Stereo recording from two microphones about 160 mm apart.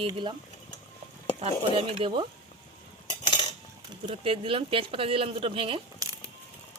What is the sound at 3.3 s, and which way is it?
Cutlery, 30° left (ahead or behind).